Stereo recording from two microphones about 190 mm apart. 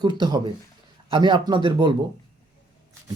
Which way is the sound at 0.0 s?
20° right (ahead or behind).